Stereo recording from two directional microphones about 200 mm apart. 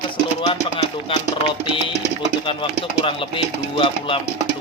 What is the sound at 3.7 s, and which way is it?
Speech, 25° left (ahead or behind).